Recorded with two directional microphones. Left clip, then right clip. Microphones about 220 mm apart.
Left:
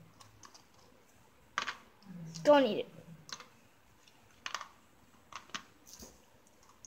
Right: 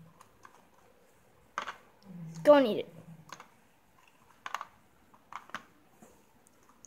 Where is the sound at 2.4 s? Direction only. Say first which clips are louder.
Right 4 dB; 15° right (ahead or behind).